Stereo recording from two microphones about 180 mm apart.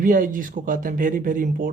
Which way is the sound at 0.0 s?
50° right (ahead or behind).